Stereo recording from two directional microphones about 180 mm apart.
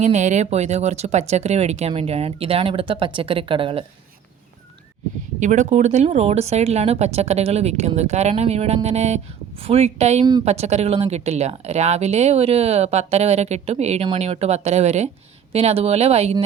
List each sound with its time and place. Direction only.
0.0 s speech: 40° right (ahead or behind)
5.4 s speech: 40° right (ahead or behind)